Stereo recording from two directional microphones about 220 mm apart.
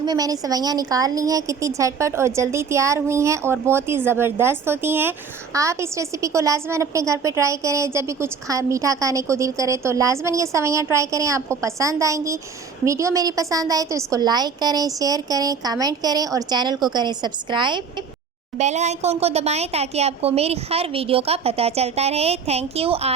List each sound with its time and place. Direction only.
0.0 s a woman's voice: 15° right (ahead or behind)
18.5 s speech: 30° right (ahead or behind)